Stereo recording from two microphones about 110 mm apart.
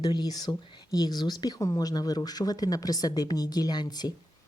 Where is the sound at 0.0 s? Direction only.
40° left (ahead or behind).